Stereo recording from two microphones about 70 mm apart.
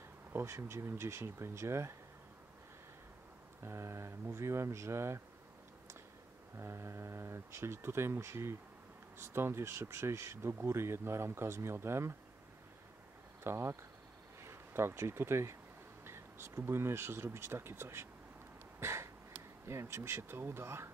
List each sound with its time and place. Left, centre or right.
0.3 s speech: right
3.6 s speech: right
6.5 s speech: right
13.4 s speech: right
18.8 s a sound: right
19.6 s speech: right